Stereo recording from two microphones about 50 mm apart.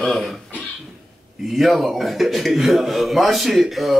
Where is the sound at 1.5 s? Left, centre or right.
Centre.